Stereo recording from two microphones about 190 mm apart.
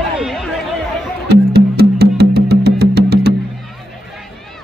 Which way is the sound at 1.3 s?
55° right (ahead or behind).